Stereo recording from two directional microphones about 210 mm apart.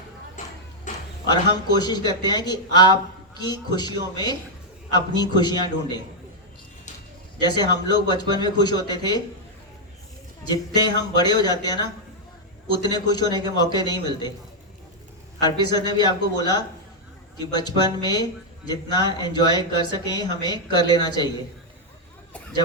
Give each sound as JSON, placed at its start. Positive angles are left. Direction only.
{"t": 0.4, "sound": "a sound", "side_deg": 35}
{"t": 1.3, "sound": "speech", "side_deg": 20}
{"t": 7.3, "sound": "speech", "side_deg": 20}
{"t": 10.5, "sound": "speech", "side_deg": 20}
{"t": 15.4, "sound": "speech", "side_deg": 20}